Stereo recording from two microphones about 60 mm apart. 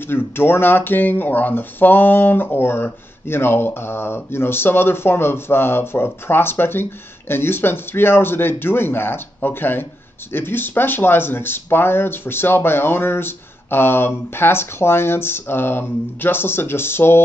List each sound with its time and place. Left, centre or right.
0.0 s speech: left